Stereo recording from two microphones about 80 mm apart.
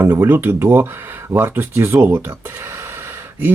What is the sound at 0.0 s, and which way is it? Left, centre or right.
Speech, right.